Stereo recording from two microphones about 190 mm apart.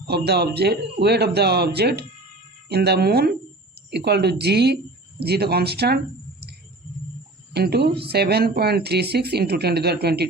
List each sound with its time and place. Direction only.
0.0 s speech: 60° right (ahead or behind)
7.5 s speech: 55° right (ahead or behind)